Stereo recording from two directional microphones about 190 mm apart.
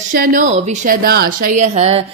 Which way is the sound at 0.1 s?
45° right (ahead or behind).